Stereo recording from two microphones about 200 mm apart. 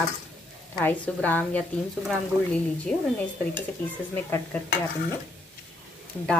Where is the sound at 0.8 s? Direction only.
10° left (ahead or behind).